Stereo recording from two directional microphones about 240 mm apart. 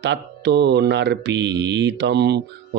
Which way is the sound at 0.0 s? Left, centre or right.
Right.